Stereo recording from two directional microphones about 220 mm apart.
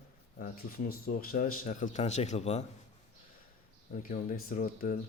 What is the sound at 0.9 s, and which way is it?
Speech, 40° left (ahead or behind).